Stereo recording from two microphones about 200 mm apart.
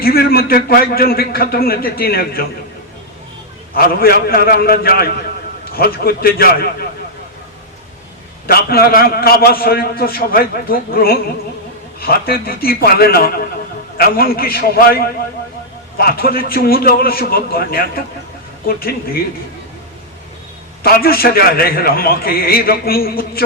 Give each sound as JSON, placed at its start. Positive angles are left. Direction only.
{"t": 0.0, "sound": "a man's voice", "side_deg": 50}
{"t": 3.8, "sound": "a man's voice", "side_deg": 50}
{"t": 8.4, "sound": "a man's voice", "side_deg": 50}
{"t": 20.8, "sound": "a man's voice", "side_deg": 50}